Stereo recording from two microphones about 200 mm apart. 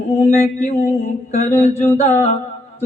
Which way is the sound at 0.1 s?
35° left (ahead or behind).